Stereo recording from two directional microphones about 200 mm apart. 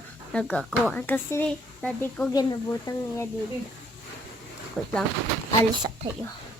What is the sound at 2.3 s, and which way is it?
Speech, 20° left (ahead or behind).